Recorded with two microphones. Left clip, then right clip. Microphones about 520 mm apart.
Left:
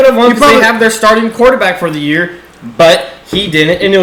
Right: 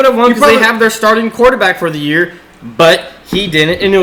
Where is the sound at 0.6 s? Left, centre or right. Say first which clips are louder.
Left 2 dB; centre.